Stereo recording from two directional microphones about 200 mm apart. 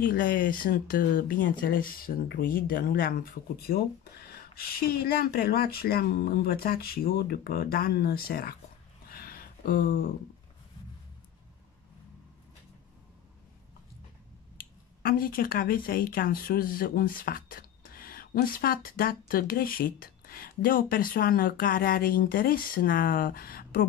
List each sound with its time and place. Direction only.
0.0 s speech: 45° left (ahead or behind)
9.1 s a sound: 45° left (ahead or behind)
14.6 s speech: 45° left (ahead or behind)